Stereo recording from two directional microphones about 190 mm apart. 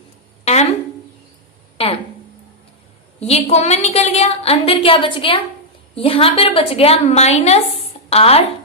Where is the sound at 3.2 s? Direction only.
35° left (ahead or behind).